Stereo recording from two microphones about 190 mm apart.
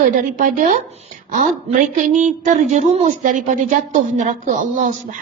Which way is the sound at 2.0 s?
40° right (ahead or behind).